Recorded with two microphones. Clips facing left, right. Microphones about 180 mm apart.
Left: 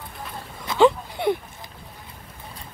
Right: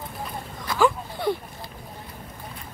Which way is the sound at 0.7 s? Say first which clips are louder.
Left 4 dB; 20° left (ahead or behind).